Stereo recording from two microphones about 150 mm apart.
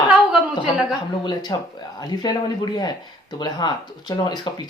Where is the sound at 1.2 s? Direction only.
30° left (ahead or behind).